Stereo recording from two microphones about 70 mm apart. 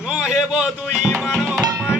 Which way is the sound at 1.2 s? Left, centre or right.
Centre.